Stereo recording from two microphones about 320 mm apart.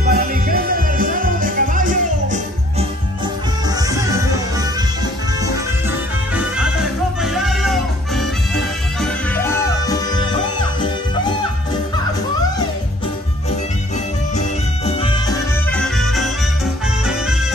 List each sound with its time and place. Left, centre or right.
0.1 s music: right
3.7 s music: centre
5.4 s music: centre
14.9 s music: centre
15.7 s music: centre